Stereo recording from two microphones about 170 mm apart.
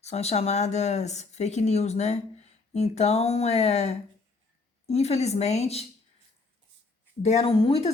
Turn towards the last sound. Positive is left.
turn(degrees=35)  # may be behind; listen again after turning